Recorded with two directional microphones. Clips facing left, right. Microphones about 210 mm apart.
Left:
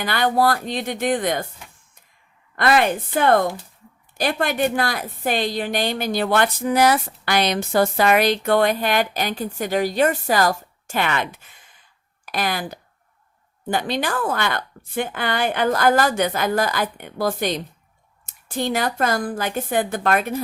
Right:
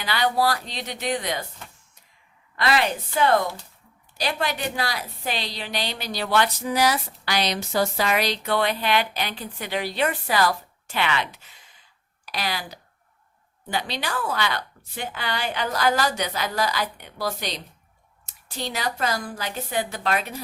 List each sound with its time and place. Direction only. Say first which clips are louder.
0.0 s a woman's voice: left 4 dB; 50° left (ahead or behind)
2.6 s a woman's voice: left 5 dB; 50° left (ahead or behind)